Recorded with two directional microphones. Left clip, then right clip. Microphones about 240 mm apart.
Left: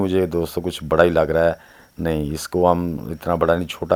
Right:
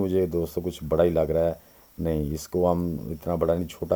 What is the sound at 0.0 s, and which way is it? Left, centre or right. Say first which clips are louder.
Speech: left 5 dB; centre.